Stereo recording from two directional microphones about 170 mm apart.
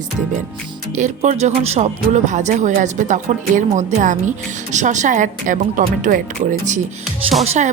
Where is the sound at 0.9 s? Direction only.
45° right (ahead or behind).